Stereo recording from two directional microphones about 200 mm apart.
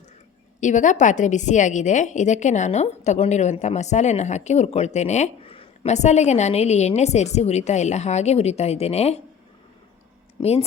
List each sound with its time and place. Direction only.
0.6 s a woman's voice: 40° left (ahead or behind)
10.4 s speech: 25° left (ahead or behind)